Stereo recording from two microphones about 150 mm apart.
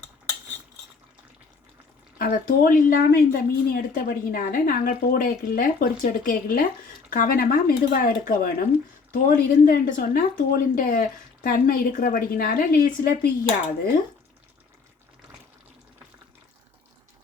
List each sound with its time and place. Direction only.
2.1 s a woman's voice: 85° left